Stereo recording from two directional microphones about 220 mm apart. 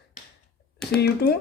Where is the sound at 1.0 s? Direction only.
45° left (ahead or behind).